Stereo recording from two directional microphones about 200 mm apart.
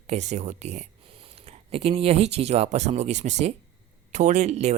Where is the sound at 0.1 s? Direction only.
35° right (ahead or behind).